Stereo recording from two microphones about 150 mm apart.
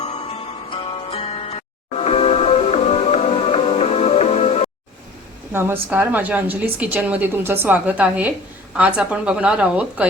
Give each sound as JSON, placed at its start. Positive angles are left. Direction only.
{"t": 0.0, "sound": "music", "side_deg": 45}
{"t": 5.5, "sound": "a woman's voice", "side_deg": -15}